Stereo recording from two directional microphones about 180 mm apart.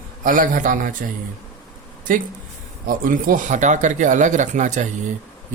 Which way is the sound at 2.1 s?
50° right (ahead or behind).